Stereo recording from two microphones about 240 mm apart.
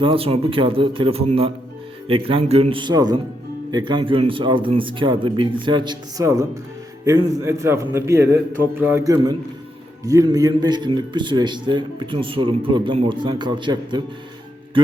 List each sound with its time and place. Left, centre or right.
0.0 s a man's voice: right